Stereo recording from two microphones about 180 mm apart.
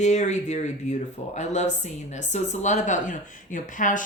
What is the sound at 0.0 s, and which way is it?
Speech, 40° left (ahead or behind).